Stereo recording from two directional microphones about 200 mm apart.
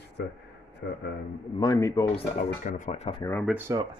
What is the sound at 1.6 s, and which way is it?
Speech, 15° left (ahead or behind).